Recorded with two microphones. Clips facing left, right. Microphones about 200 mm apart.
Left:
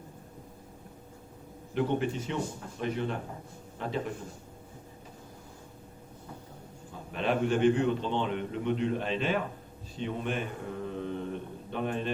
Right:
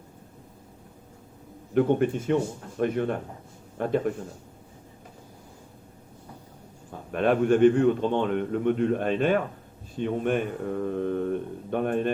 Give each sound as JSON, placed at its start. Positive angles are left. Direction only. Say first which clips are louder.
{"t": 1.7, "sound": "a man's voice", "louder": "right 7 dB", "side_deg": -50}
{"t": 7.1, "sound": "a man's voice", "louder": "right 7 dB", "side_deg": -50}